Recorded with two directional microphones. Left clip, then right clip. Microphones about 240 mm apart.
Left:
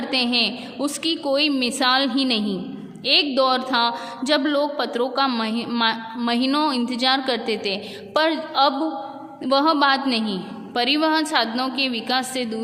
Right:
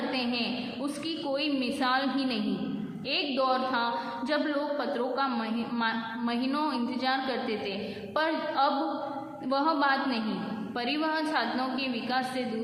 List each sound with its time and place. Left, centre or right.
0.1 s a woman's voice: left